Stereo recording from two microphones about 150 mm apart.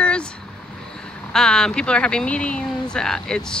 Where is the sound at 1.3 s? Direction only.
5° left (ahead or behind).